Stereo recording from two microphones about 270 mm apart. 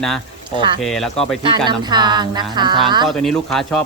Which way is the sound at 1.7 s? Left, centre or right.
Centre.